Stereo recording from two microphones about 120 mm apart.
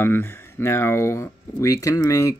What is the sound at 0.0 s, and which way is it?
Speech, 20° left (ahead or behind).